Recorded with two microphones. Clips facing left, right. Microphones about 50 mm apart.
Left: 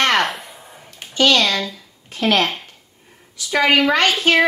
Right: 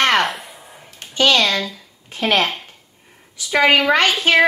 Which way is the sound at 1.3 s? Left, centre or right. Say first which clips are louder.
Right 1 dB; centre.